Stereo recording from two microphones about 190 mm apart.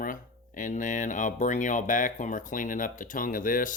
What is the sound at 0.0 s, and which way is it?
Speech, 45° left (ahead or behind).